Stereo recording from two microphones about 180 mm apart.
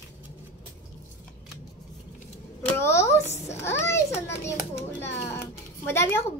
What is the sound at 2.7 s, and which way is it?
A child's voice, 15° left (ahead or behind).